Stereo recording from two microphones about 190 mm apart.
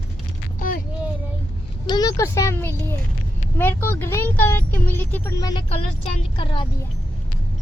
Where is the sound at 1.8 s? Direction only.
20° left (ahead or behind).